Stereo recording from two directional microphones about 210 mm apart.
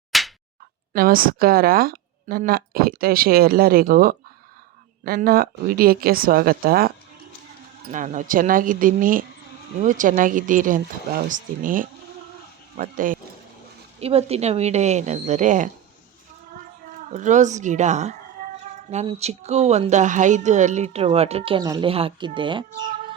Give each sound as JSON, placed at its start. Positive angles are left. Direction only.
{"t": 0.1, "sound": "slap", "side_deg": 0}
{"t": 0.9, "sound": "a woman's voice", "side_deg": -45}
{"t": 17.1, "sound": "speech", "side_deg": -35}